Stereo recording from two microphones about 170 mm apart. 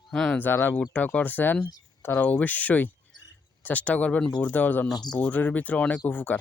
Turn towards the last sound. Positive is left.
turn(degrees=10)  # may be behind; listen again after turning